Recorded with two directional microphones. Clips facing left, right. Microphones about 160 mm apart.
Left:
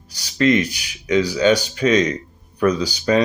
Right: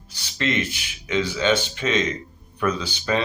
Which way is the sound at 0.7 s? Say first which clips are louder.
Left 7 dB; 40° left (ahead or behind).